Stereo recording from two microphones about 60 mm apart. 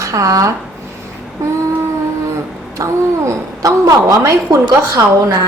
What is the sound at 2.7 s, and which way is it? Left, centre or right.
A woman's voice, right.